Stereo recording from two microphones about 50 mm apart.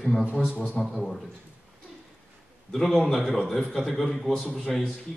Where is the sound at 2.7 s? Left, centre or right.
Centre.